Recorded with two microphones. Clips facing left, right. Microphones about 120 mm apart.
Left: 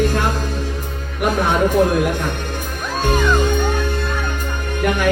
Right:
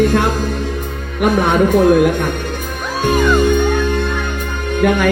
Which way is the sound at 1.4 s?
60° right (ahead or behind).